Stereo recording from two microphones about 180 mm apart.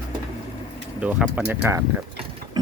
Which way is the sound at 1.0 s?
10° right (ahead or behind).